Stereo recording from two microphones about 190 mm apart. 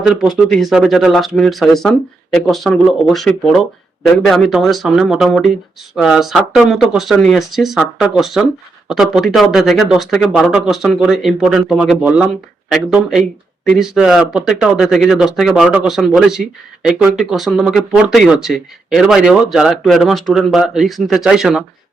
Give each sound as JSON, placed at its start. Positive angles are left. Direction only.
{"t": 0.0, "sound": "speech", "side_deg": -5}